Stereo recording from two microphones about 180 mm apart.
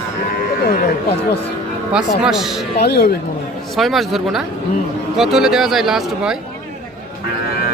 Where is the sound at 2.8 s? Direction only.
60° left (ahead or behind).